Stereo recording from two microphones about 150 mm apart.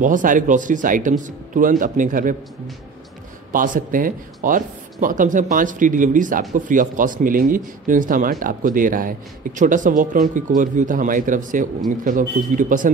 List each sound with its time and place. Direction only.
0.0 s speech: 60° right (ahead or behind)
3.5 s speech: 65° right (ahead or behind)